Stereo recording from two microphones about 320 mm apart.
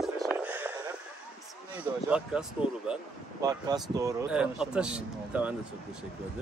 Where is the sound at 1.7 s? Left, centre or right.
Centre.